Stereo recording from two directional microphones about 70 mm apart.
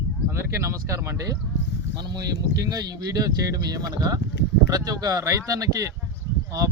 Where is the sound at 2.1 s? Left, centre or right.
Right.